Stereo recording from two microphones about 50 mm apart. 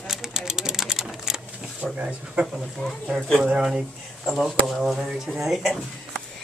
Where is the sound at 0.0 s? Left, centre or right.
Centre.